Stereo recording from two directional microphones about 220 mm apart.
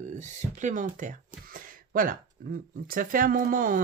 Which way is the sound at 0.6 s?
35° right (ahead or behind).